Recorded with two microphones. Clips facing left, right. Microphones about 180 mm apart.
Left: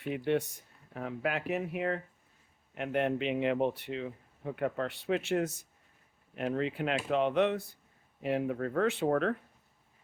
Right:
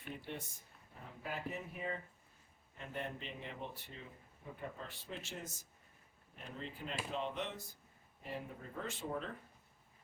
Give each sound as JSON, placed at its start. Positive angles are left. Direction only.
{"t": 0.3, "sound": "speech", "side_deg": 75}
{"t": 8.2, "sound": "speech", "side_deg": 75}